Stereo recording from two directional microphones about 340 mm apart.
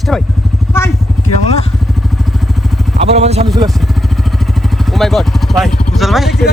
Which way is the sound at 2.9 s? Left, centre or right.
Centre.